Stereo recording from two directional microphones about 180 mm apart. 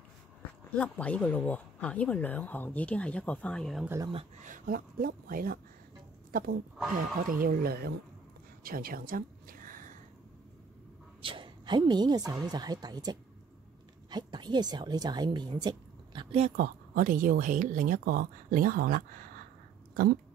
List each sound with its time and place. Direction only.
0.7 s speech: 10° left (ahead or behind)
3.8 s speech: 15° right (ahead or behind)
4.1 s speech: 40° right (ahead or behind); by 7.9 s 60° right (ahead or behind)
8.6 s a sound: 55° right (ahead or behind)
11.2 s a woman's voice: 30° right (ahead or behind)
16.5 s speech: 50° right (ahead or behind)